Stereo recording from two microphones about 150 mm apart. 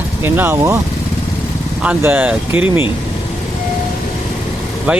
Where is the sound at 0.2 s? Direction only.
15° right (ahead or behind).